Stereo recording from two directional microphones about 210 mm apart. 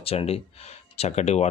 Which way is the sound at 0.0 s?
25° left (ahead or behind).